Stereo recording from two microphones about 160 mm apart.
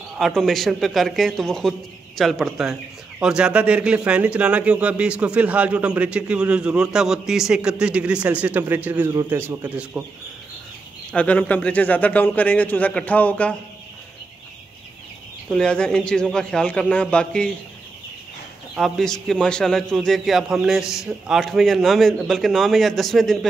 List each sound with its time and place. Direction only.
0.2 s a man's voice: 5° left (ahead or behind)
11.1 s a man's voice: 10° left (ahead or behind)
15.5 s a man's voice: 5° left (ahead or behind)
18.8 s a man's voice: 5° left (ahead or behind)